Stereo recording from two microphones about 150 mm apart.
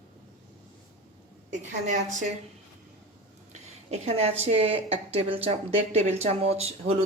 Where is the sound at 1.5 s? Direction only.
55° right (ahead or behind).